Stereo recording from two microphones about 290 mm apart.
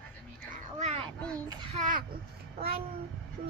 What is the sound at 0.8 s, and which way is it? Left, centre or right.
Child singing, right.